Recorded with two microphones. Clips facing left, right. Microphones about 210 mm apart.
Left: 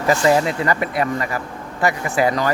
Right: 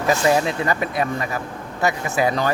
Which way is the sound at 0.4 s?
20° right (ahead or behind).